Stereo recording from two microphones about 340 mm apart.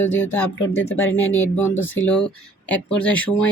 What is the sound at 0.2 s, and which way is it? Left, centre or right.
Speech, centre.